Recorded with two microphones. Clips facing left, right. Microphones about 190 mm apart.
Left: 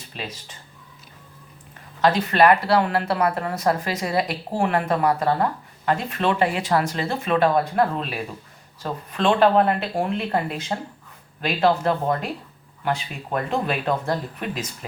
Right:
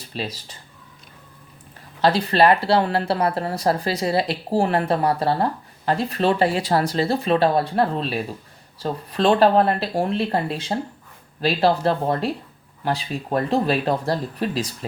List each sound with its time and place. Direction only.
0.1 s speech: 35° right (ahead or behind)
2.0 s speech: 30° right (ahead or behind)